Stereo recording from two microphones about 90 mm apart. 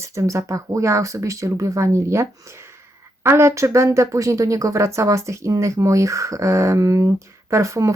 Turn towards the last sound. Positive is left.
turn(degrees=-35)  # may be behind; listen again after turning